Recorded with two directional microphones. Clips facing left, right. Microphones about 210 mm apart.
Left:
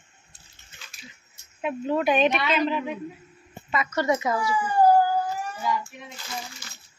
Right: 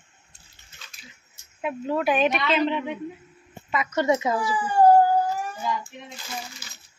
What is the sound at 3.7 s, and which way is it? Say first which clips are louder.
A woman's voice: right 2 dB; 20° right (ahead or behind).